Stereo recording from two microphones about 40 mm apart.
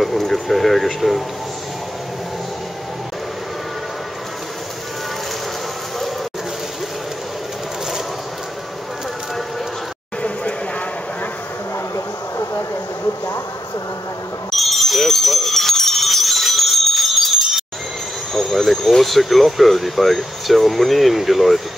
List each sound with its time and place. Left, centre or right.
0.0 s speech: centre
14.5 s a sound: centre
18.3 s speech: centre